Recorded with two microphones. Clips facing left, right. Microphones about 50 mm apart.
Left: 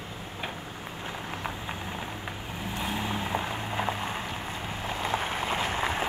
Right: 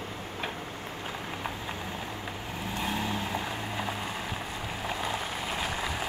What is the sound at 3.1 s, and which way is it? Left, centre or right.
Vehicle, left.